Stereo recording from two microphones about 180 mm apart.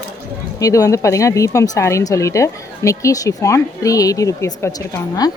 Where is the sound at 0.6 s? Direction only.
20° left (ahead or behind).